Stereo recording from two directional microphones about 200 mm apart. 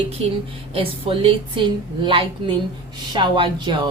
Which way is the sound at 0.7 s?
25° right (ahead or behind).